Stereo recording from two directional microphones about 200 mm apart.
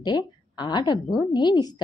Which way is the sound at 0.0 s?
20° left (ahead or behind).